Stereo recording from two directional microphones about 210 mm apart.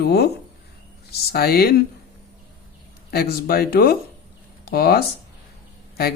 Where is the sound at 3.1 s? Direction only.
45° left (ahead or behind).